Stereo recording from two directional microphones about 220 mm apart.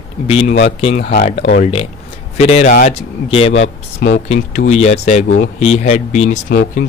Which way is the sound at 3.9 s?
45° left (ahead or behind).